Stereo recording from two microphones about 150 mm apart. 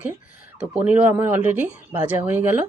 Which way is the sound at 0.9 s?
10° right (ahead or behind).